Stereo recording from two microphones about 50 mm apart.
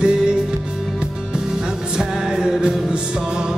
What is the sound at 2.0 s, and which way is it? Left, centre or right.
Music, centre.